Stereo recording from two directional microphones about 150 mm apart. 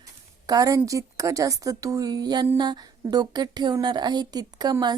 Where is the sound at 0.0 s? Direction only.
25° right (ahead or behind).